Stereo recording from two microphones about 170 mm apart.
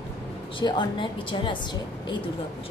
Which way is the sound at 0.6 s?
25° left (ahead or behind).